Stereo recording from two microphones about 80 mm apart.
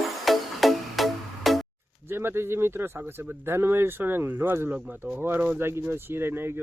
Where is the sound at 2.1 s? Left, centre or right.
Right.